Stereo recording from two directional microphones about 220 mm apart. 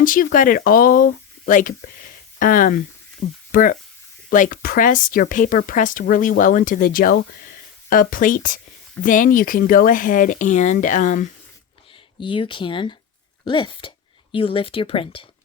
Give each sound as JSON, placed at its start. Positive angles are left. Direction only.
{"t": 0.0, "sound": "speech", "side_deg": 40}
{"t": 12.2, "sound": "speech", "side_deg": 25}